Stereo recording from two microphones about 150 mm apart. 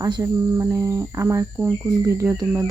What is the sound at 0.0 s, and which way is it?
Speech, 20° right (ahead or behind).